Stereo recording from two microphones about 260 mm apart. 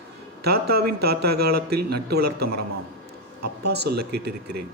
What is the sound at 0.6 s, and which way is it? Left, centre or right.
Speech, right.